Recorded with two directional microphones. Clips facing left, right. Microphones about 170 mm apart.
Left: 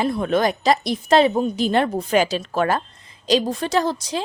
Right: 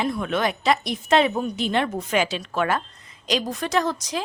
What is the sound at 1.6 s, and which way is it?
A woman's voice, 40° left (ahead or behind).